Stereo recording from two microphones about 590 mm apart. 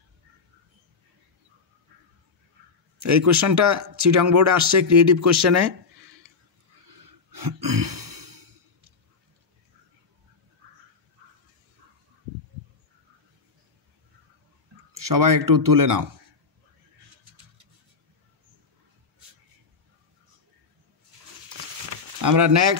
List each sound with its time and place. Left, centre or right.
3.0 s speech: right
7.2 s a sound: right
15.0 s speech: right
22.2 s speech: right